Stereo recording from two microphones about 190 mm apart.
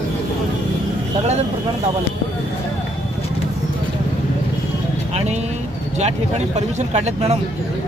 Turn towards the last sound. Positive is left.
turn(degrees=-35)  # may be behind; listen again after turning